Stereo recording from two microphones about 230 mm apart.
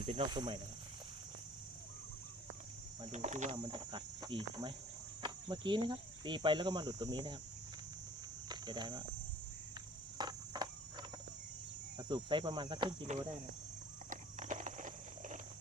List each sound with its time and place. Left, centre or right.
0.0 s speech: right
3.1 s speech: right
3.6 s speech: centre
8.4 s speech: centre
10.2 s cricket: centre
11.9 s speech: centre
14.1 s horse: right